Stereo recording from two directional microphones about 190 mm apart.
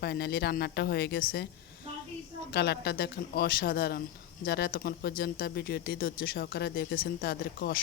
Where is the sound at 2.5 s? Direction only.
60° left (ahead or behind).